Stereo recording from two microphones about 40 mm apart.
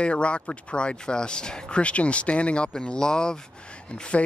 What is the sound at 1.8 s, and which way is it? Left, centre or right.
Speech, left.